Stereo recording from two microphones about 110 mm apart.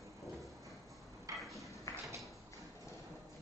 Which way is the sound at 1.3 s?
30° right (ahead or behind).